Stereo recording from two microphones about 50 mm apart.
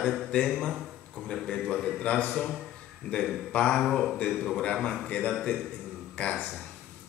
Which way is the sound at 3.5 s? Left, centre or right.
Left.